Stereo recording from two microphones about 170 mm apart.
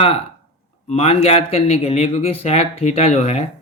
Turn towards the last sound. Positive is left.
turn(degrees=40)  # may be behind; listen again after turning